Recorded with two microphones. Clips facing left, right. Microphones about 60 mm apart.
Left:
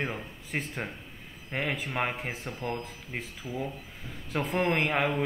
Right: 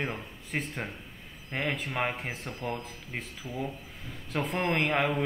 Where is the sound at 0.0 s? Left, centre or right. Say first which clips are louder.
Left 1 dB; centre.